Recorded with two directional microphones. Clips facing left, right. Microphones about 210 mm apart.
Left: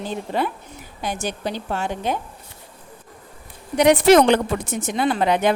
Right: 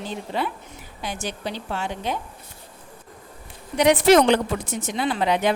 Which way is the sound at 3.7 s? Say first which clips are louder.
Left 2 dB; 50° left (ahead or behind).